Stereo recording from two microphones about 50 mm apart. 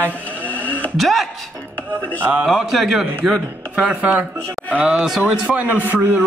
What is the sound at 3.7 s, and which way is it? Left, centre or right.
Speech, right.